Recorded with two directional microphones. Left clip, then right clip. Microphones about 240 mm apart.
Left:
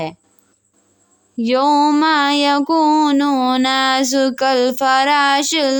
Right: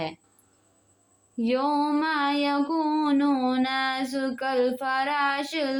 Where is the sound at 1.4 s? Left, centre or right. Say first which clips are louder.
Left 11 dB; left.